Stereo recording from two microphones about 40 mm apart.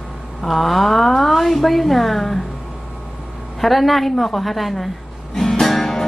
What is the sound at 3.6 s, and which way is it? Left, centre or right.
Speech, centre.